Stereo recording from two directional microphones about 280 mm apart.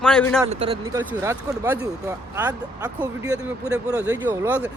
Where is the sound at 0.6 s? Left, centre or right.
Centre.